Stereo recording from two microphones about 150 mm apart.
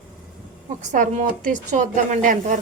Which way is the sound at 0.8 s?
55° right (ahead or behind).